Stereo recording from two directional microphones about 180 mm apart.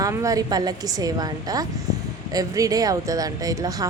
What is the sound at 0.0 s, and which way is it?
Speech, 20° right (ahead or behind).